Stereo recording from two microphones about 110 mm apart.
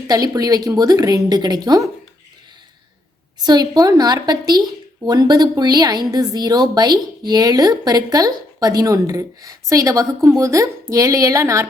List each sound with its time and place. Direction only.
0.1 s a woman's voice: 35° right (ahead or behind)
3.4 s a woman's voice: 40° right (ahead or behind)